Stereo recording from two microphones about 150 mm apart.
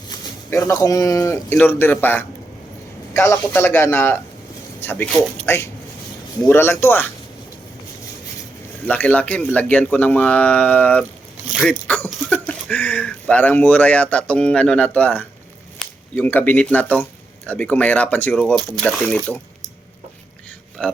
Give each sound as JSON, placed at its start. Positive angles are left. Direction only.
{"t": 0.5, "sound": "speech", "side_deg": 20}
{"t": 8.9, "sound": "speech", "side_deg": 10}
{"t": 11.9, "sound": "speech", "side_deg": 10}
{"t": 20.8, "sound": "speech", "side_deg": 5}